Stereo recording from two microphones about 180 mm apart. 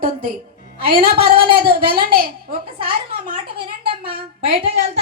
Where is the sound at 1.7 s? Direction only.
60° right (ahead or behind).